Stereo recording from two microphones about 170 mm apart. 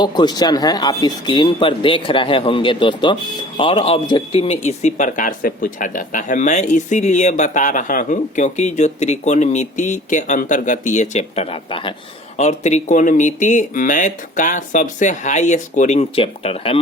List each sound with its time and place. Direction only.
0.0 s a man's voice: 25° left (ahead or behind)
12.4 s a man's voice: 40° left (ahead or behind)